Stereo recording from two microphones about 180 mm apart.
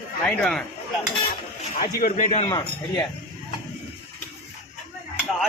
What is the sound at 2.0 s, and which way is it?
Speech, 45° left (ahead or behind).